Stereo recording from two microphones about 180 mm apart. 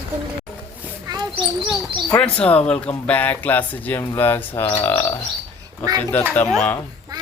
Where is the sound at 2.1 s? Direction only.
5° left (ahead or behind).